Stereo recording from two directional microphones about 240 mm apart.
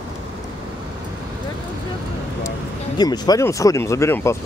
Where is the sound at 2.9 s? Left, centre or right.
Centre.